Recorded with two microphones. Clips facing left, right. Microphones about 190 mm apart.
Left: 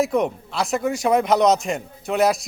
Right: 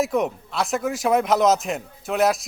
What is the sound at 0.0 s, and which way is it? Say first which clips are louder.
A man's voice: left 2 dB; centre (ahead or behind).